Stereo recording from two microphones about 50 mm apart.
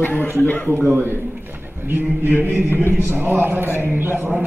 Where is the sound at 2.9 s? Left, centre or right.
Right.